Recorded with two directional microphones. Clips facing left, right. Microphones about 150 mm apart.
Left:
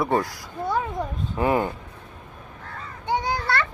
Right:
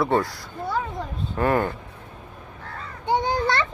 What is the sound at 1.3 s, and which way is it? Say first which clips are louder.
Speech: even; 15° left (ahead or behind).